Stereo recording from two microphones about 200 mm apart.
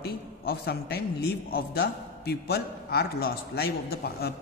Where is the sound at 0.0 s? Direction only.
50° left (ahead or behind).